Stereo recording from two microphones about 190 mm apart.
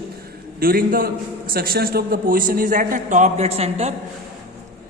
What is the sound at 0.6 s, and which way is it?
A man's voice, 50° right (ahead or behind).